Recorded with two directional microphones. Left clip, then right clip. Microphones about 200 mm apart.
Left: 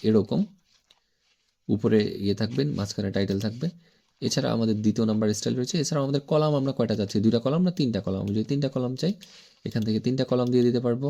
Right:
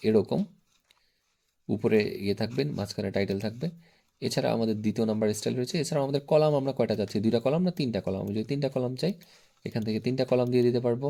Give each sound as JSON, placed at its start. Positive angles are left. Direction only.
{"t": 0.0, "sound": "speech", "side_deg": 20}
{"t": 1.7, "sound": "speech", "side_deg": 20}